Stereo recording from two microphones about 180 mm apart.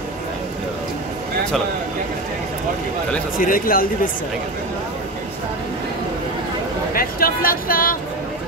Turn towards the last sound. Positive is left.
turn(degrees=55)  # may be behind; listen again after turning